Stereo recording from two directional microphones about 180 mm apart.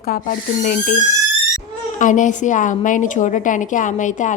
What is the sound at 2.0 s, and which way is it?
A woman's voice, 45° left (ahead or behind).